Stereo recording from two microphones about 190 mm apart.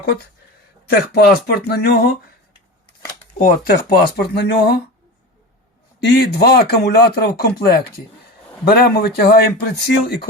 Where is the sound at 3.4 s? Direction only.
50° left (ahead or behind).